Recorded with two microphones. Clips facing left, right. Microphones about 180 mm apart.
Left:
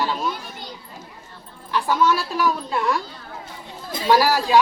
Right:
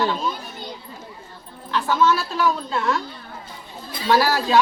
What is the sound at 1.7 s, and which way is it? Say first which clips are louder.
Speech: even; 15° left (ahead or behind).